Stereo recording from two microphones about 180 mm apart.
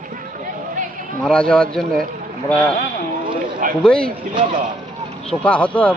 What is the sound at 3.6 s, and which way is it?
Speech, 45° right (ahead or behind).